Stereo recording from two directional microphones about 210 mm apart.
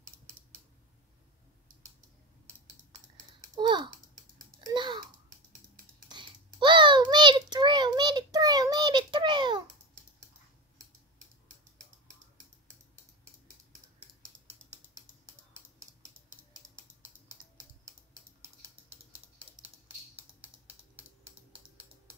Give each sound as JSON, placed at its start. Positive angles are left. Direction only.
{"t": 3.5, "sound": "babbling", "side_deg": -20}
{"t": 6.0, "sound": "typing", "side_deg": -20}
{"t": 20.2, "sound": "typing", "side_deg": -10}